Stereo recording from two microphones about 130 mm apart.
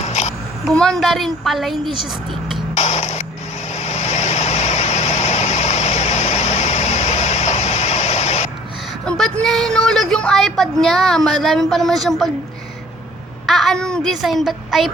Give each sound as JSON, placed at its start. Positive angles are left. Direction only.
{"t": 0.0, "sound": "babbling", "side_deg": 60}
{"t": 0.7, "sound": "a woman's voice", "side_deg": 5}
{"t": 1.9, "sound": "speech", "side_deg": -35}
{"t": 2.7, "sound": "music", "side_deg": 60}
{"t": 3.7, "sound": "vehicle", "side_deg": 60}
{"t": 9.0, "sound": "a sound", "side_deg": 5}
{"t": 9.4, "sound": "a woman's voice", "side_deg": 5}
{"t": 13.5, "sound": "a woman's voice", "side_deg": 0}